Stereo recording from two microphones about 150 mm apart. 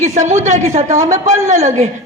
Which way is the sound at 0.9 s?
20° right (ahead or behind).